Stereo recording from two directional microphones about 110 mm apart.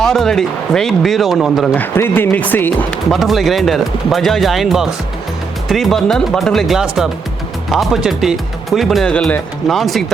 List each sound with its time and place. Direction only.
0.0 s speech: 5° left (ahead or behind)
1.7 s speech: 15° left (ahead or behind)
3.1 s speech: centre (ahead or behind)